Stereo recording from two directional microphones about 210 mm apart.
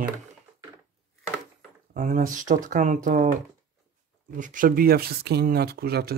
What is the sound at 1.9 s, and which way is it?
Speech, 40° right (ahead or behind).